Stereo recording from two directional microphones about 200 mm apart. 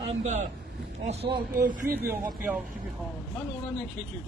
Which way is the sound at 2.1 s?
10° right (ahead or behind).